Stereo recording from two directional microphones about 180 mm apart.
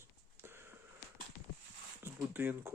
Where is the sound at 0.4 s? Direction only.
15° right (ahead or behind).